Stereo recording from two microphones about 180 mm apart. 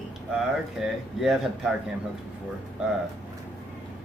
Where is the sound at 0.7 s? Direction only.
Centre (ahead or behind).